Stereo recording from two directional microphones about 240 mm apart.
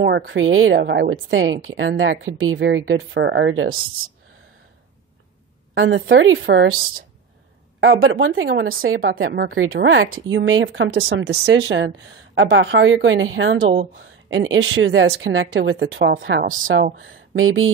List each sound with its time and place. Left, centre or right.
0.0 s speech: right
5.8 s speech: right
7.8 s a woman's voice: right